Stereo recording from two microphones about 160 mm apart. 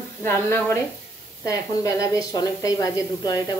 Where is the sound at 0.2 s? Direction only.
15° left (ahead or behind).